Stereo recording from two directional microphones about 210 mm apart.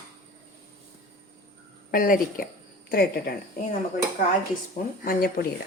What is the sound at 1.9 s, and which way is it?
Speech, 40° left (ahead or behind).